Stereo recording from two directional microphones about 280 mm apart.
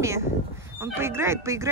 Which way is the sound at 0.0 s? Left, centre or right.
Centre.